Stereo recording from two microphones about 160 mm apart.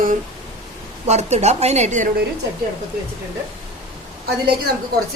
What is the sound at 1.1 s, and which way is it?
A woman's voice, 45° right (ahead or behind).